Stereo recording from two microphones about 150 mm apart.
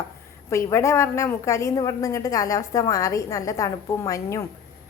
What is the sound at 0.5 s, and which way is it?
A woman's voice, 20° left (ahead or behind).